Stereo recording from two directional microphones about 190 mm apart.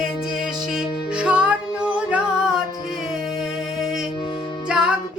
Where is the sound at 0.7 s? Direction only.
5° right (ahead or behind).